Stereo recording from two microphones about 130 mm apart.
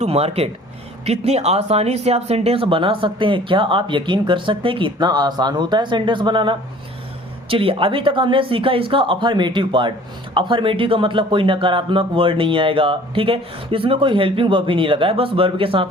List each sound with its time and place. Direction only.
0.0 s speech: 50° right (ahead or behind)